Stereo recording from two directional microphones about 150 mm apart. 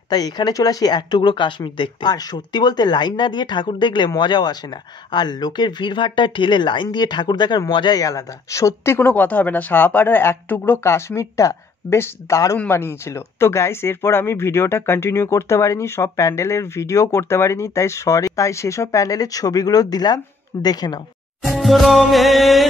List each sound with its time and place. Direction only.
0.1 s speech: 25° left (ahead or behind)
21.4 s music: centre (ahead or behind)